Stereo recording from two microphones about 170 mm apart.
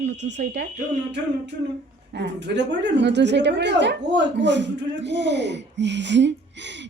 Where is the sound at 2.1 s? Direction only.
90° right.